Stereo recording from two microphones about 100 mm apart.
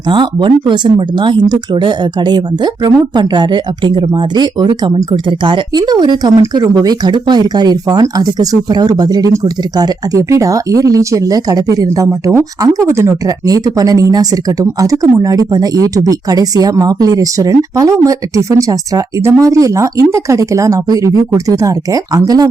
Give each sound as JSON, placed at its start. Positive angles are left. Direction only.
{"t": 0.1, "sound": "speech", "side_deg": -55}